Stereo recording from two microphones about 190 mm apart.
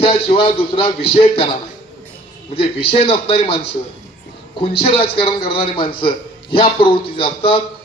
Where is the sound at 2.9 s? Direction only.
30° left (ahead or behind).